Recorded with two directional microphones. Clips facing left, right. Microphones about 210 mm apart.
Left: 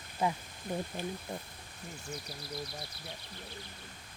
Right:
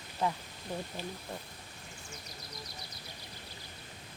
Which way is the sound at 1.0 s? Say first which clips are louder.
Left 3 dB; 50° left (ahead or behind).